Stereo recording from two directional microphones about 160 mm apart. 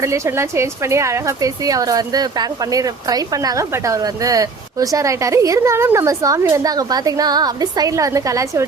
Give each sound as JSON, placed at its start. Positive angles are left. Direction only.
{"t": 0.0, "sound": "speech", "side_deg": -15}